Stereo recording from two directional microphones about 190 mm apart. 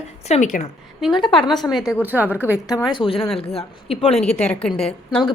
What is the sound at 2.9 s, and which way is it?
A woman's voice, 25° left (ahead or behind).